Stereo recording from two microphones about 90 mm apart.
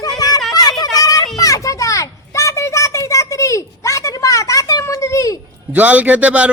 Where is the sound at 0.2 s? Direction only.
40° left (ahead or behind).